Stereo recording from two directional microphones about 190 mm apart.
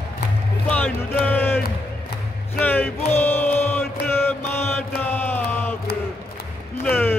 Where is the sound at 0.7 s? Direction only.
5° left (ahead or behind).